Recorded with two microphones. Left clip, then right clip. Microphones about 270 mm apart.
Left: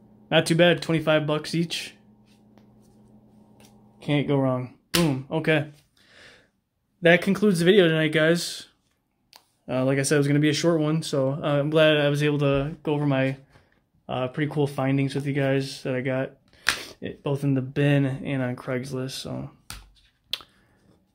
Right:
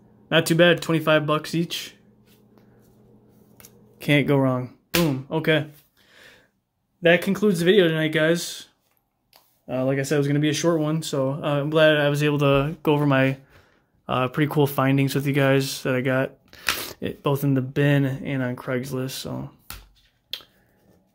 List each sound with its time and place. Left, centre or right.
0.3 s speech: centre
4.0 s speech: centre
20.3 s finger snapping: centre